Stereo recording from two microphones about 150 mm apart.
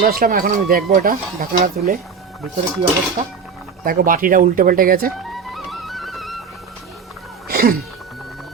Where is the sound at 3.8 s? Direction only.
70° right (ahead or behind).